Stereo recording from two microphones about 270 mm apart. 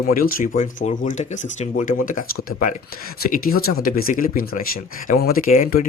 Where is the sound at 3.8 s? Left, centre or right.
Left.